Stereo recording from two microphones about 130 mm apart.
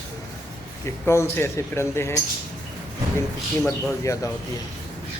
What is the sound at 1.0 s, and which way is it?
A man's voice, 20° left (ahead or behind).